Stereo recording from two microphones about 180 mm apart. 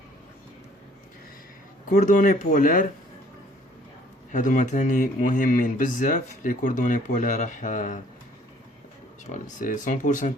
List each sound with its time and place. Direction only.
1.9 s speech: 45° left (ahead or behind)
4.3 s speech: 45° left (ahead or behind)
9.2 s speech: 45° left (ahead or behind)